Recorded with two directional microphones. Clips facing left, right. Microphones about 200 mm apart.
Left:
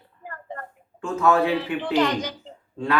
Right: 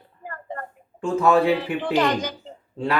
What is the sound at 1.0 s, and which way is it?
Speech, 30° right (ahead or behind).